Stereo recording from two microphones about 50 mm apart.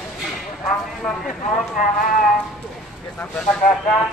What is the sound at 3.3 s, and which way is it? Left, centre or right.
Speech, centre.